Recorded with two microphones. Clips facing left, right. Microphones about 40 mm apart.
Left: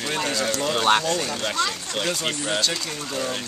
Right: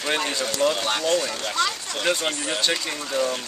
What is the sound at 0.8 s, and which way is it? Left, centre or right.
Speech, left.